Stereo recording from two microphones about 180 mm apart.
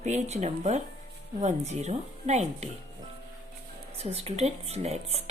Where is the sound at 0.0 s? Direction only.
40° right (ahead or behind).